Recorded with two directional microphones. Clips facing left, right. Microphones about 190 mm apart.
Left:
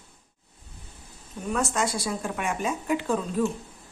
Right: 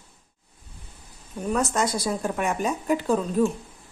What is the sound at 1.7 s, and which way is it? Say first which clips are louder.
A woman's voice: right 3 dB; 40° right (ahead or behind).